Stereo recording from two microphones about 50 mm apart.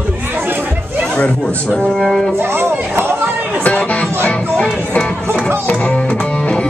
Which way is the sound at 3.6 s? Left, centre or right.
Left.